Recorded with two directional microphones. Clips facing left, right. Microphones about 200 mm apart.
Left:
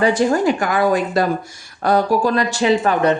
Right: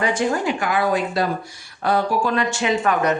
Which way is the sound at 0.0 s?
35° left (ahead or behind).